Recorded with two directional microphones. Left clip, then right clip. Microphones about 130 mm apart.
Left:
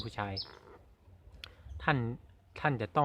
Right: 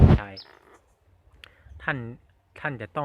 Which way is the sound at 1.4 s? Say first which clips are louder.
Right 2 dB; 15° left (ahead or behind).